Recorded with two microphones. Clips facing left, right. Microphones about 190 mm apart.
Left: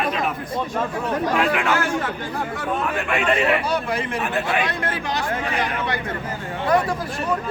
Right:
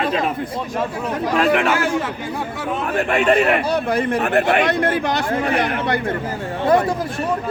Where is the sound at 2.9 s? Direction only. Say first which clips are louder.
Right 8 dB; 40° right (ahead or behind).